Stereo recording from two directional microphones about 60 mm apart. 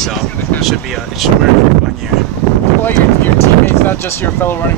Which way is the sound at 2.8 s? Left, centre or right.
Left.